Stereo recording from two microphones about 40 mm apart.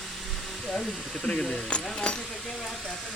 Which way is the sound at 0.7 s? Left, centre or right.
Centre.